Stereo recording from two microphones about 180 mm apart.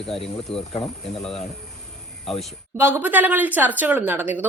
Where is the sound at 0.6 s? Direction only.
30° left (ahead or behind).